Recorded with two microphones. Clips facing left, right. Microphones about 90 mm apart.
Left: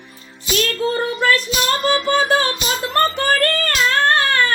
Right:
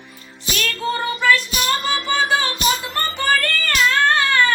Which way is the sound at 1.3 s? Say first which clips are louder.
Left 2 dB; centre (ahead or behind).